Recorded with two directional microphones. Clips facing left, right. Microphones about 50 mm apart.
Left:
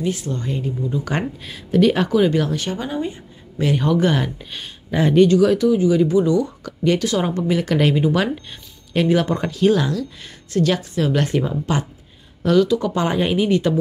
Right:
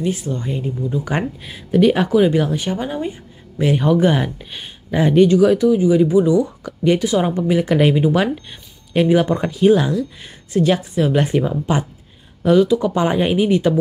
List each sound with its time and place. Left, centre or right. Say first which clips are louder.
0.3 s speech: right 1 dB; right